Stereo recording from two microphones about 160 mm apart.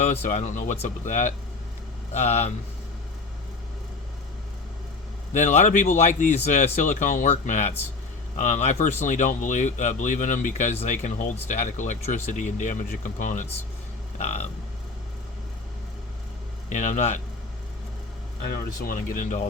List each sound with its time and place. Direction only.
0.0 s speech: 45° left (ahead or behind)
5.3 s speech: 50° left (ahead or behind)
16.7 s speech: 50° left (ahead or behind)
18.4 s speech: 70° left (ahead or behind)